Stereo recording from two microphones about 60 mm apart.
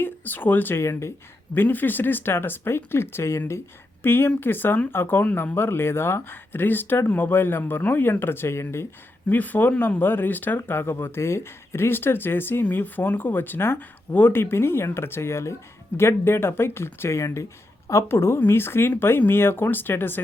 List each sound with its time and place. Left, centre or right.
0.0 s speech: left
0.8 s speech: left
1.6 s speech: left
4.0 s speech: left
5.2 s speech: left
9.3 s speech: left
10.6 s speech: left